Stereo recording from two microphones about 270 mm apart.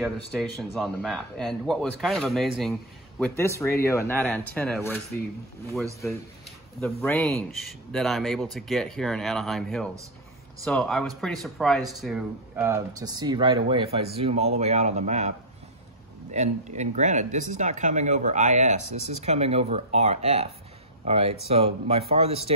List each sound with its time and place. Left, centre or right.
0.4 s speech: centre
6.8 s speech: centre; by 22.5 s right